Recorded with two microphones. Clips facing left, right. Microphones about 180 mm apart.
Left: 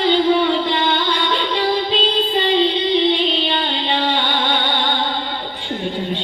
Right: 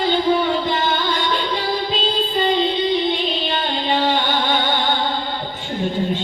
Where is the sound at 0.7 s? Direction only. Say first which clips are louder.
Left 1 dB; 45° right (ahead or behind).